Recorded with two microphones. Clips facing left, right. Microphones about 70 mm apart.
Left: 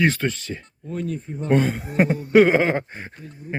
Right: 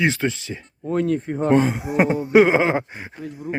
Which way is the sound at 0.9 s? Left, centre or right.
Right.